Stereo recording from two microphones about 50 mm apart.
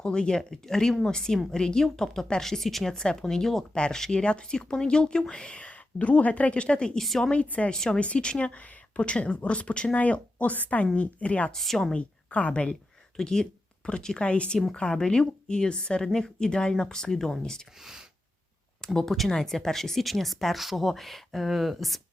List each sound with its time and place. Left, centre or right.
0.0 s a woman's voice: centre
7.0 s speech: centre
7.3 s speech: left
11.5 s speech: centre
11.9 s a woman's voice: left
13.1 s a woman's voice: centre
18.9 s speech: centre